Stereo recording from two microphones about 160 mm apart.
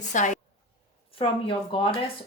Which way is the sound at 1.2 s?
35° left (ahead or behind).